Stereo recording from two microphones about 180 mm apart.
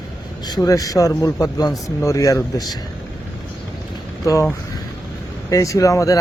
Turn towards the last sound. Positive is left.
turn(degrees=20)  # may be behind; listen again after turning